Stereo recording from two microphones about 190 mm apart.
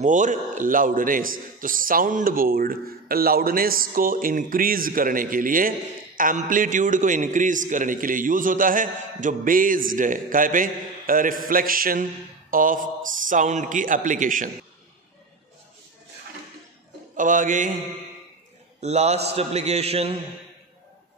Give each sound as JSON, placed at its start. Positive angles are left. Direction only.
{"t": 0.0, "sound": "a man's voice", "side_deg": -40}
{"t": 17.2, "sound": "a man's voice", "side_deg": -45}
{"t": 18.8, "sound": "a man's voice", "side_deg": -35}